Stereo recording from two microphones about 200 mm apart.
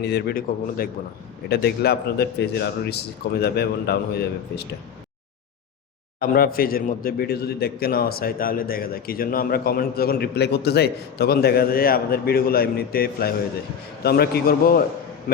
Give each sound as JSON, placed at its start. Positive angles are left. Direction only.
{"t": 0.0, "sound": "a man's voice", "side_deg": 55}
{"t": 6.1, "sound": "a man's voice", "side_deg": 50}